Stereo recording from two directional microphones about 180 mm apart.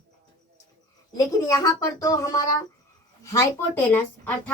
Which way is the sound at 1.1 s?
20° left (ahead or behind).